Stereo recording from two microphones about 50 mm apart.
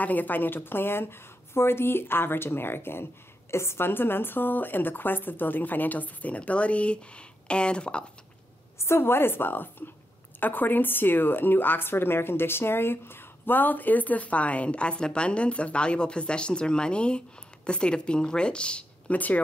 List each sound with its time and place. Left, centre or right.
0.0 s a woman's voice: left; by 8.0 s centre
8.7 s a woman's voice: left
19.1 s a woman's voice: left